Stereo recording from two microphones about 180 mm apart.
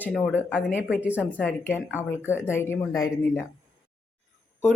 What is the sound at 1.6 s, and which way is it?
Speech, 10° left (ahead or behind).